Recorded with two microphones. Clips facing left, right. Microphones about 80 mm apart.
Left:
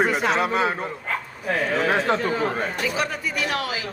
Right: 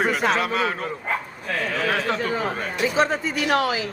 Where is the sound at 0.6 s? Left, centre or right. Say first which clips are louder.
Left 1 dB; left.